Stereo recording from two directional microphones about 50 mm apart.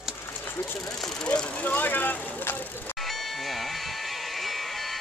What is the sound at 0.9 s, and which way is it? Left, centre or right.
Speech, centre.